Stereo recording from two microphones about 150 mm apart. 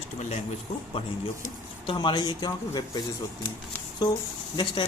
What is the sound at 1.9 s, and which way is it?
Speech, 30° left (ahead or behind).